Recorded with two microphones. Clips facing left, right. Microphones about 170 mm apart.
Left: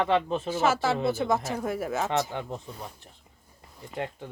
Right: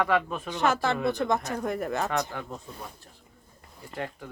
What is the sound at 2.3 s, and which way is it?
Speech, 20° left (ahead or behind).